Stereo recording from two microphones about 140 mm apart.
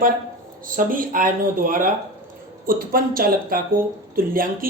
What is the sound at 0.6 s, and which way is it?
Speech, 80° right.